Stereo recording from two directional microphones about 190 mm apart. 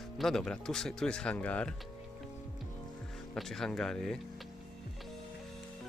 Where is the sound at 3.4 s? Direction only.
Centre (ahead or behind).